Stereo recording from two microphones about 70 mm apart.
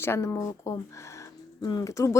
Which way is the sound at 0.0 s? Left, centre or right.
Left.